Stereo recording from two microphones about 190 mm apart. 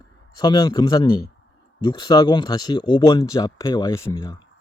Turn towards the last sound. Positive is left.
turn(degrees=15)  # may be behind; listen again after turning